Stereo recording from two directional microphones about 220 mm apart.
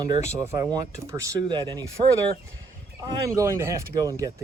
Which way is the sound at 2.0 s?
25° right (ahead or behind).